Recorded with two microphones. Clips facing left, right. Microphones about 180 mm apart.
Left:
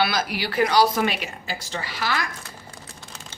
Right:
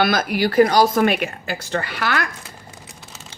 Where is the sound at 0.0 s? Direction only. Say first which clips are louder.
Right 6 dB; 50° right (ahead or behind).